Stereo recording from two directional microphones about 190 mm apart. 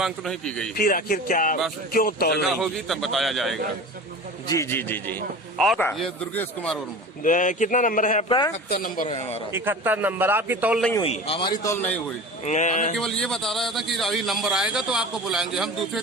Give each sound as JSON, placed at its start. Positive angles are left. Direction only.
{"t": 0.0, "sound": "a man's voice", "side_deg": 5}
{"t": 0.8, "sound": "speech", "side_deg": 50}
{"t": 2.6, "sound": "a man's voice", "side_deg": 0}
{"t": 4.4, "sound": "a man's voice", "side_deg": 15}
{"t": 7.2, "sound": "speech", "side_deg": 45}
{"t": 8.3, "sound": "a man's voice", "side_deg": 25}
{"t": 8.7, "sound": "speech", "side_deg": 50}
{"t": 9.0, "sound": "a man's voice", "side_deg": 30}
{"t": 9.5, "sound": "a man's voice", "side_deg": -10}
{"t": 11.0, "sound": "a man's voice", "side_deg": 30}
{"t": 12.5, "sound": "a man's voice", "side_deg": 40}
{"t": 13.0, "sound": "a man's voice", "side_deg": 5}